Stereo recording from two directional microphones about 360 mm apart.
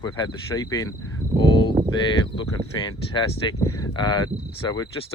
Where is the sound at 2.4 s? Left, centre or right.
Centre.